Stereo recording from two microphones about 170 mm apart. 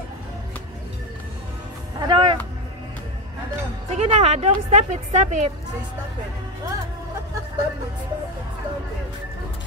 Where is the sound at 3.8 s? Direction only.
35° right (ahead or behind).